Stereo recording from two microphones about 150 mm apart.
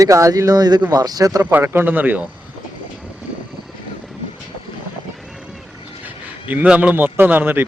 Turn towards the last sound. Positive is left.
turn(degrees=-15)  # may be behind; listen again after turning